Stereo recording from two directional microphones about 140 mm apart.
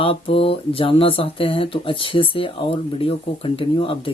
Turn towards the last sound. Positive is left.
turn(degrees=40)  # may be behind; listen again after turning